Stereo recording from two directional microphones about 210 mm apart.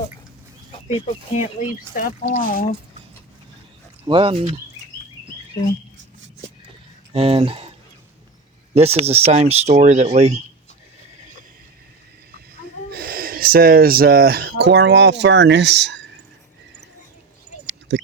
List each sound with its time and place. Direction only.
0.9 s speech: 30° left (ahead or behind)
4.0 s speech: 25° right (ahead or behind)
7.1 s speech: 30° right (ahead or behind)
8.7 s speech: 30° right (ahead or behind)
12.9 s speech: 45° right (ahead or behind)
17.7 s a sound: 55° right (ahead or behind)